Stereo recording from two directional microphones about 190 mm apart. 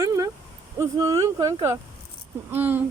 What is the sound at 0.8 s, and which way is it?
Speech, 20° right (ahead or behind).